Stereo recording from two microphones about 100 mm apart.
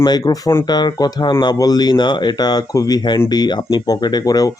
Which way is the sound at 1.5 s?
40° left (ahead or behind).